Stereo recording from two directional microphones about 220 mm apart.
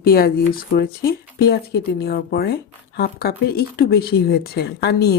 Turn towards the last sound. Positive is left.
turn(degrees=45)  # may be behind; listen again after turning